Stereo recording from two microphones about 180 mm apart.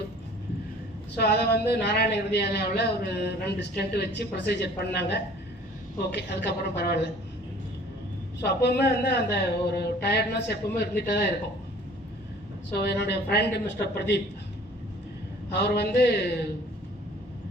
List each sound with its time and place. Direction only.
1.1 s a woman's voice: 65° left (ahead or behind)
8.4 s a woman's voice: 70° left (ahead or behind)
12.7 s a woman's voice: 65° left (ahead or behind)
15.4 s a woman's voice: 70° left (ahead or behind)